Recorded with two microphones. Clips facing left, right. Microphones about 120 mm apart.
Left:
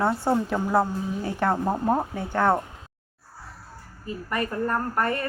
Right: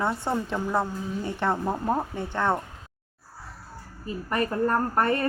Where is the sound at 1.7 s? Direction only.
10° left (ahead or behind).